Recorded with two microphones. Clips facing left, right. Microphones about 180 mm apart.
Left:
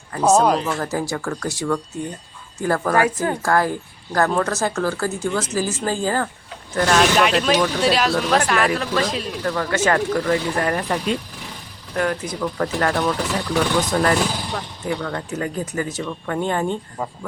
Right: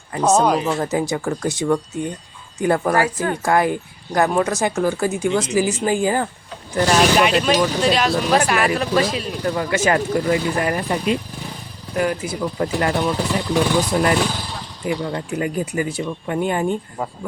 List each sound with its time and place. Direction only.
0.2 s speech: centre (ahead or behind)
0.6 s speech: 20° right (ahead or behind)
3.0 s speech: 20° left (ahead or behind)
3.4 s speech: 20° right (ahead or behind); by 8.2 s centre (ahead or behind)
8.3 s speech: 10° right (ahead or behind)
9.4 s speech: 15° right (ahead or behind)